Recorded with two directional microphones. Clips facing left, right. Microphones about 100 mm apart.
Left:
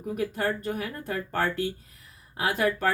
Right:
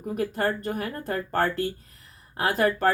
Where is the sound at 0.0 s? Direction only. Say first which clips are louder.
Right 2 dB; 45° right (ahead or behind).